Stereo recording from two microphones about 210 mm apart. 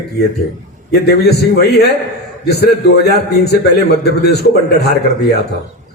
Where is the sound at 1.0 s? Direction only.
50° left (ahead or behind).